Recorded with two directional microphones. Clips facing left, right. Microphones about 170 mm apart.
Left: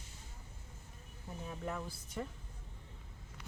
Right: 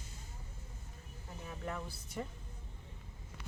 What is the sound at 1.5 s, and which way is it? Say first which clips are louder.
Speech: even; centre (ahead or behind).